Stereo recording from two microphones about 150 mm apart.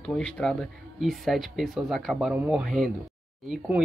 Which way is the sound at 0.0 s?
5° left (ahead or behind).